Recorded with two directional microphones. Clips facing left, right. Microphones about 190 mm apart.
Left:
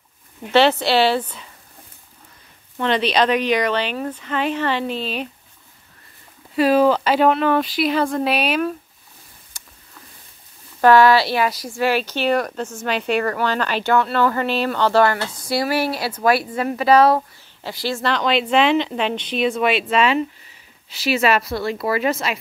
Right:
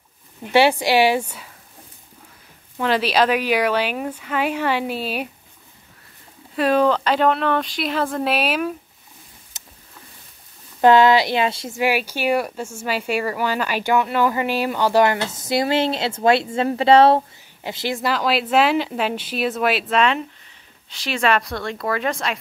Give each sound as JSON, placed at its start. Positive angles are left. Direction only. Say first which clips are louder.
{"t": 0.5, "sound": "speech", "louder": "even", "side_deg": -10}
{"t": 2.8, "sound": "speech", "louder": "even", "side_deg": -5}
{"t": 6.5, "sound": "speech", "louder": "left 2 dB", "side_deg": 5}
{"t": 9.5, "sound": "a sound", "louder": "right 1 dB", "side_deg": -20}
{"t": 10.8, "sound": "speech", "louder": "even", "side_deg": -20}
{"t": 18.1, "sound": "speech", "louder": "left 1 dB", "side_deg": -5}